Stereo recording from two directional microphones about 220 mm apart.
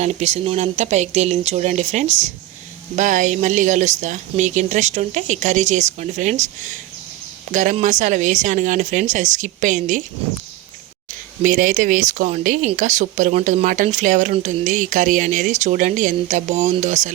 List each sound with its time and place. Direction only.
0.0 s speech: 30° right (ahead or behind)
11.4 s speech: 40° right (ahead or behind)